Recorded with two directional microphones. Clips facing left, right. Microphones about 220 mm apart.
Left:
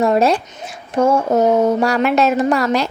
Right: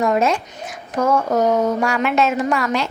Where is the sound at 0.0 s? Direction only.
35° left (ahead or behind).